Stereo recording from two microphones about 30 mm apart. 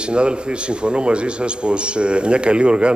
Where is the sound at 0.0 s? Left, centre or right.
Right.